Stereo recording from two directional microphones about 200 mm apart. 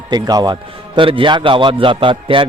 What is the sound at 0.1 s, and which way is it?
A man's voice, 20° right (ahead or behind).